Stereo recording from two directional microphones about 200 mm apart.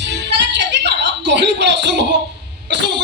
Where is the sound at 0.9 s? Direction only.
60° right (ahead or behind).